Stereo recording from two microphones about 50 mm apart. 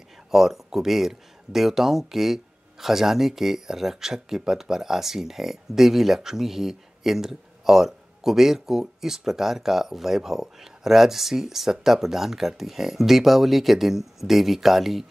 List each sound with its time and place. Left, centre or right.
0.3 s speech: centre